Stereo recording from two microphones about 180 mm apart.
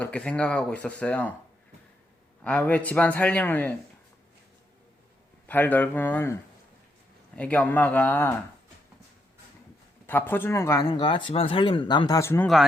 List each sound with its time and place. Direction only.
0.0 s a man's voice: 5° left (ahead or behind)
2.4 s a man's voice: 5° left (ahead or behind)
5.5 s a man's voice: 10° left (ahead or behind)
7.3 s a man's voice: 10° left (ahead or behind)
10.1 s speech: 10° left (ahead or behind)